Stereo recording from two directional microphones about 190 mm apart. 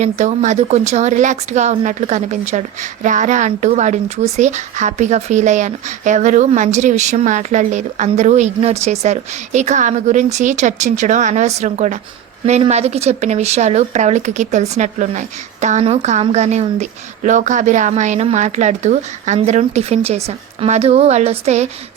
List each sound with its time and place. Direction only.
0.0 s speech: 40° right (ahead or behind)